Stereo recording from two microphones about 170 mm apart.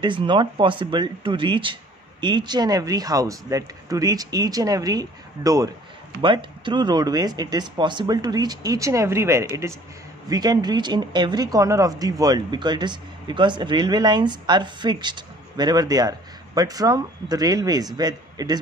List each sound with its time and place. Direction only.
0.0 s speech: 30° right (ahead or behind)